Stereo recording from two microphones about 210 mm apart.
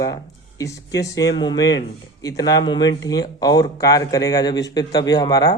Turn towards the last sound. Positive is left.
turn(degrees=20)  # may be behind; listen again after turning